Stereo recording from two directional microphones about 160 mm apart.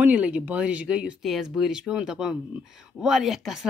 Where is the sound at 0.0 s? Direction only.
10° right (ahead or behind).